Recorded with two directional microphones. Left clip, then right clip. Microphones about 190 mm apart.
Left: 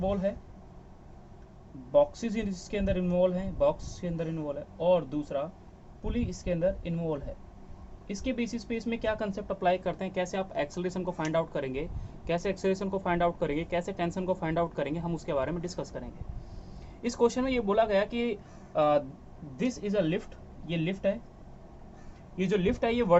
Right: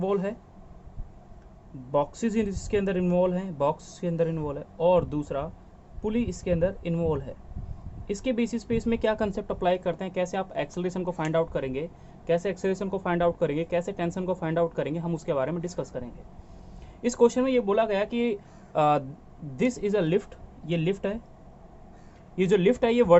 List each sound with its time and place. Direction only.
0.0 s speech: 60° right (ahead or behind)
1.9 s speech: 55° right (ahead or behind)
22.4 s speech: 55° right (ahead or behind)